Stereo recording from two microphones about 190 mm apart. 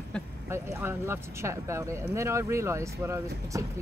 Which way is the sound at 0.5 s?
15° right (ahead or behind).